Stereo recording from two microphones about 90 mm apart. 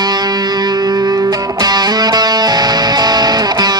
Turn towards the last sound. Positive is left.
turn(degrees=-50)  # may be behind; listen again after turning